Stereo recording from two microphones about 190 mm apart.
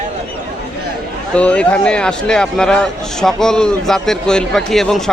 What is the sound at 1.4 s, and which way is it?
Speech, 5° left (ahead or behind).